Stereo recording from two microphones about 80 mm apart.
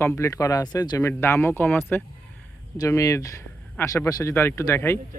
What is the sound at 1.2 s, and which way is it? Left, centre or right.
Speech, left.